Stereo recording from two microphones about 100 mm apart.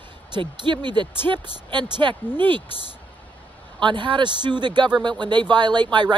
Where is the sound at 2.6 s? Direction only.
70° left (ahead or behind).